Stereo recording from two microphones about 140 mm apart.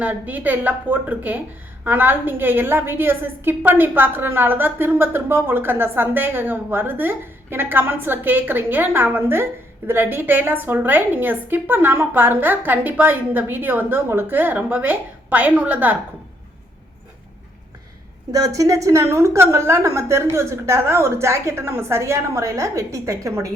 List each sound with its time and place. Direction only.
0.0 s a woman's voice: 10° right (ahead or behind)
18.3 s a woman's voice: 25° right (ahead or behind)